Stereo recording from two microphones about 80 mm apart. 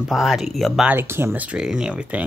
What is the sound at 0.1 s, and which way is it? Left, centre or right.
Speech, centre.